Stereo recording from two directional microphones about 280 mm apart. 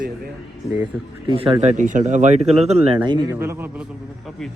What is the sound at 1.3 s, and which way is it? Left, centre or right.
Speech, centre.